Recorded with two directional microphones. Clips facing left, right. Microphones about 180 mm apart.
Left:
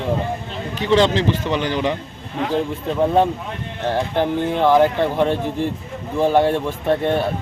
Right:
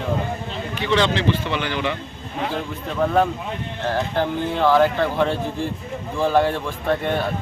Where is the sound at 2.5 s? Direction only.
25° left (ahead or behind).